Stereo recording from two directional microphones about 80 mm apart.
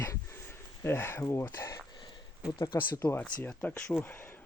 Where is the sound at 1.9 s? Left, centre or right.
Left.